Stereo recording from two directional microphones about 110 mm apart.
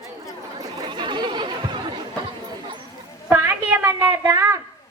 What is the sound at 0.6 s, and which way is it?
Chatter, 40° right (ahead or behind).